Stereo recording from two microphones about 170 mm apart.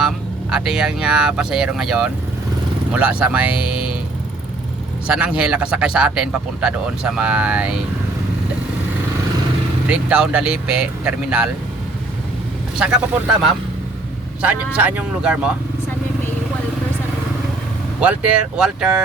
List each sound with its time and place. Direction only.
0.5 s speech: 5° right (ahead or behind)
5.0 s speech: 5° right (ahead or behind)
9.9 s speech: 5° right (ahead or behind)
12.8 s speech: 5° right (ahead or behind)
18.0 s speech: 5° right (ahead or behind)